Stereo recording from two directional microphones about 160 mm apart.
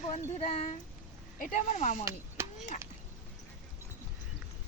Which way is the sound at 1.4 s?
50° left (ahead or behind).